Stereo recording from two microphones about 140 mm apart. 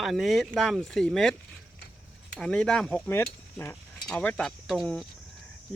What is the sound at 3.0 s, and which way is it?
Speech, 15° left (ahead or behind).